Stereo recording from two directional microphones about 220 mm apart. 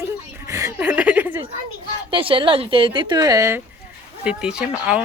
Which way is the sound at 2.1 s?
25° right (ahead or behind).